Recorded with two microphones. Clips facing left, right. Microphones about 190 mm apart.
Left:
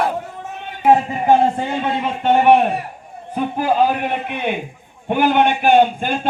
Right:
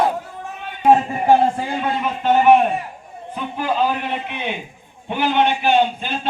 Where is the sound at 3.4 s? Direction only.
45° left (ahead or behind).